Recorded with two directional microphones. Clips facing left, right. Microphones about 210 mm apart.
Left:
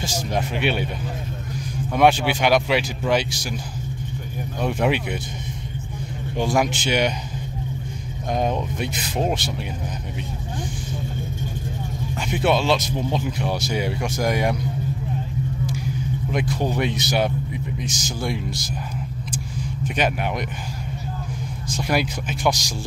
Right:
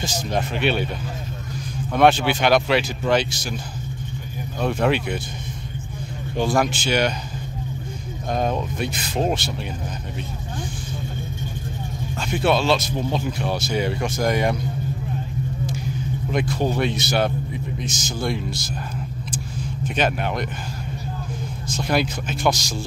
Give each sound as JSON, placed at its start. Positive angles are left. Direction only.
{"t": 0.0, "sound": "speech", "side_deg": 10}
{"t": 2.0, "sound": "speech", "side_deg": 10}
{"t": 4.6, "sound": "speech", "side_deg": 15}
{"t": 6.3, "sound": "speech", "side_deg": 15}
{"t": 8.3, "sound": "speech", "side_deg": 15}
{"t": 12.2, "sound": "speech", "side_deg": 15}
{"t": 16.3, "sound": "speech", "side_deg": 15}
{"t": 19.3, "sound": "vehicle", "side_deg": 15}
{"t": 21.6, "sound": "speech", "side_deg": 15}